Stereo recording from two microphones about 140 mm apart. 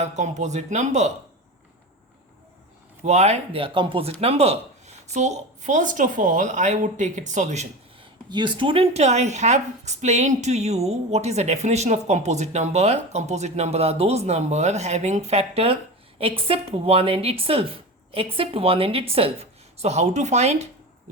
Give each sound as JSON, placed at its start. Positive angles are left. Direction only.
{"t": 0.0, "sound": "speech", "side_deg": -55}
{"t": 3.0, "sound": "speech", "side_deg": -50}
{"t": 8.3, "sound": "a woman's voice", "side_deg": -35}